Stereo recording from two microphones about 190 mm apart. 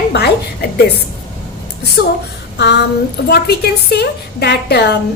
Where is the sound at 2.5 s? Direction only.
60° left (ahead or behind).